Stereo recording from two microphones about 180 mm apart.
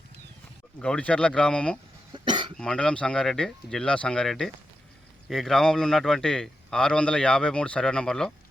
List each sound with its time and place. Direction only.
0.8 s a man's voice: 5° left (ahead or behind)
2.1 s cough: 25° right (ahead or behind)
2.6 s a man's voice: 5° left (ahead or behind)